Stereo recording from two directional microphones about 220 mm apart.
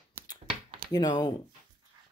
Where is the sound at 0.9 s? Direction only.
20° left (ahead or behind).